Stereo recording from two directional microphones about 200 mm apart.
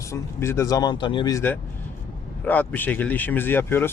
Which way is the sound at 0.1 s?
15° left (ahead or behind).